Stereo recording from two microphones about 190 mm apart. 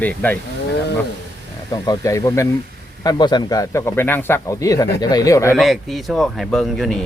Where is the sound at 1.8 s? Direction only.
20° left (ahead or behind).